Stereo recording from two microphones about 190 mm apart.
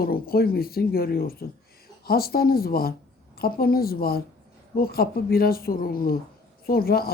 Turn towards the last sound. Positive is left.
turn(degrees=50)  # may be behind; listen again after turning